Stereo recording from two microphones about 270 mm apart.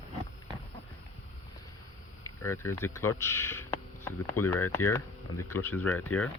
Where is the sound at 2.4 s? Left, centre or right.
Centre.